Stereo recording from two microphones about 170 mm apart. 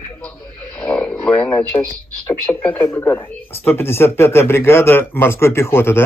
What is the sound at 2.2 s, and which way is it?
Speech, 10° left (ahead or behind).